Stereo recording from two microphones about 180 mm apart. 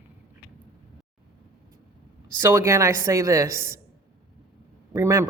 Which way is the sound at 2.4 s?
15° right (ahead or behind).